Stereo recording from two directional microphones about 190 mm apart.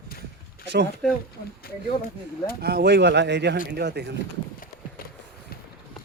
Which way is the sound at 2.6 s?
55° right (ahead or behind).